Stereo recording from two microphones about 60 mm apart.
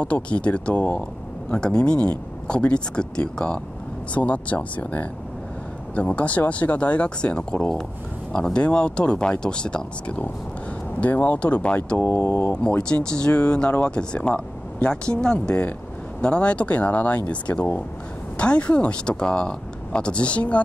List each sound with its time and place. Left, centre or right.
0.0 s speech: left
12.0 s speech: left
12.5 s speech: centre